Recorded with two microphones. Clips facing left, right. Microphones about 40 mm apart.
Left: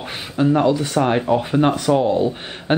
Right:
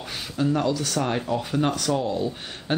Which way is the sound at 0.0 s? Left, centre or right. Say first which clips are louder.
Left 6 dB; left.